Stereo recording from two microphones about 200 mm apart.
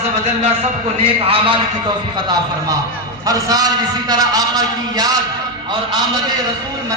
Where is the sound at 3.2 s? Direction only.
20° right (ahead or behind).